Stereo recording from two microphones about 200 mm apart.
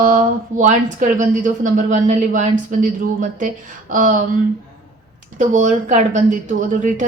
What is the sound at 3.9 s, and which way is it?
Speech, 40° right (ahead or behind).